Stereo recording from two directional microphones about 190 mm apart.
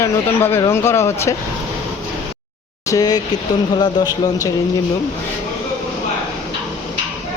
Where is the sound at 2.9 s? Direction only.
20° left (ahead or behind).